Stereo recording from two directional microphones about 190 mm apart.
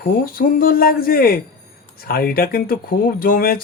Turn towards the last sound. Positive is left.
turn(degrees=50)  # may be behind; listen again after turning